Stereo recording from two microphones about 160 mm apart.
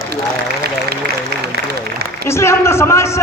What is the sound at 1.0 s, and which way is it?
Applause, 90° right.